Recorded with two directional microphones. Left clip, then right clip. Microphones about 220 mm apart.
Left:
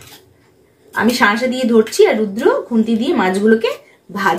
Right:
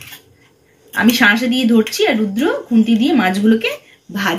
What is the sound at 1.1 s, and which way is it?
A woman's voice, 15° left (ahead or behind).